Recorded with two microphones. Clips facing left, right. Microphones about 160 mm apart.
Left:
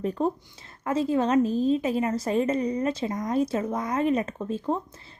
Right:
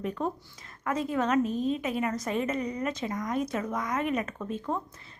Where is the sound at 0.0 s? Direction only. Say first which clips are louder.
Left 5 dB; 35° left (ahead or behind).